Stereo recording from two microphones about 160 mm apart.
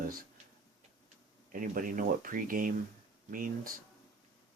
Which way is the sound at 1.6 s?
60° right (ahead or behind).